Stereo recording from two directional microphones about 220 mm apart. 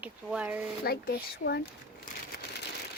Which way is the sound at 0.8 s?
45° left (ahead or behind).